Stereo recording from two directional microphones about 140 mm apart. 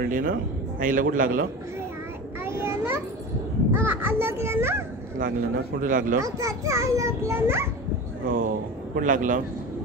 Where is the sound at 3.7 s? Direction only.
15° right (ahead or behind).